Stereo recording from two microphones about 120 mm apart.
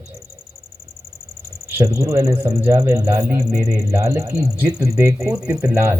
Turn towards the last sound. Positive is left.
turn(degrees=-20)  # may be behind; listen again after turning